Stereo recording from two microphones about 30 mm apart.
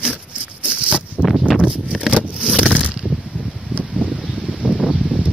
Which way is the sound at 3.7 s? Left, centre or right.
Right.